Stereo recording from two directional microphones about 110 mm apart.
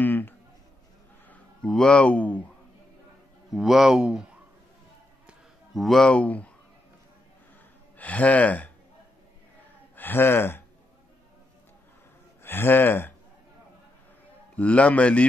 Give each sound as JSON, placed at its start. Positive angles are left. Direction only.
{"t": 0.0, "sound": "a sound", "side_deg": 15}
{"t": 1.3, "sound": "speech", "side_deg": 5}
{"t": 3.5, "sound": "speech", "side_deg": 0}
{"t": 5.8, "sound": "speech", "side_deg": 0}
{"t": 8.0, "sound": "speech", "side_deg": 15}
{"t": 9.9, "sound": "speech", "side_deg": 20}
{"t": 12.4, "sound": "speech", "side_deg": 20}
{"t": 14.6, "sound": "speech", "side_deg": 10}